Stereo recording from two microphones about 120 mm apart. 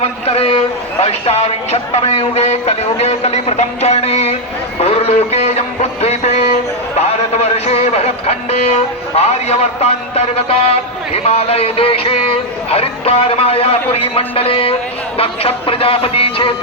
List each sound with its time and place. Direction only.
0.0 s a man's voice: 55° left (ahead or behind)
4.8 s a sound: 55° left (ahead or behind)
7.0 s a man's voice: 60° left (ahead or behind)